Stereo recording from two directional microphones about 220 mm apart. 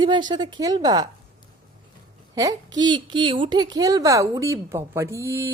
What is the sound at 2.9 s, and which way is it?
Speech, 20° right (ahead or behind).